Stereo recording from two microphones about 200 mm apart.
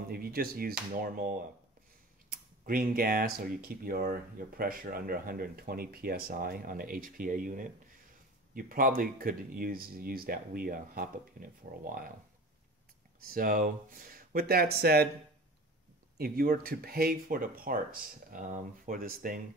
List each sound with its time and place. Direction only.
0.1 s speech: 50° right (ahead or behind)
13.2 s speech: 45° right (ahead or behind)
16.2 s speech: 45° right (ahead or behind)